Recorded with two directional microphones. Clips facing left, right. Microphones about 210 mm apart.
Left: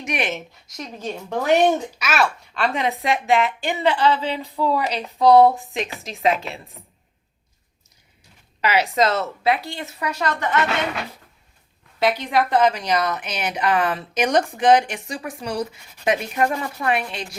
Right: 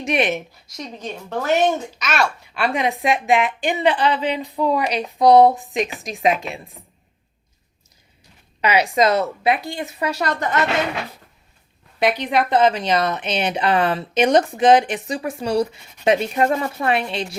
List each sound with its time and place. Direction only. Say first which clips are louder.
0.0 s speech: right 6 dB; 25° right (ahead or behind)
0.8 s a woman's voice: left 1 dB; 5° left (ahead or behind)
2.6 s a woman's voice: right 2 dB; 15° right (ahead or behind)
8.6 s a woman's voice: right 2 dB; 15° right (ahead or behind)
10.1 s a woman's voice: left 1 dB; 40° right (ahead or behind)
11.9 s a woman's voice: right 1 dB; 15° right (ahead or behind)